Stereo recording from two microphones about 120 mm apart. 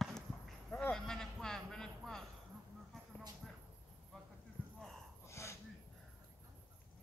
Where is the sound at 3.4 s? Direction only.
Centre (ahead or behind).